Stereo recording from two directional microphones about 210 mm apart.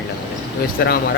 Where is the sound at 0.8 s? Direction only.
50° left (ahead or behind).